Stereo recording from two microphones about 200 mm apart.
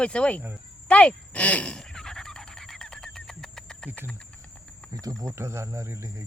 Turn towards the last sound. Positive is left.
turn(degrees=-15)  # may be behind; listen again after turning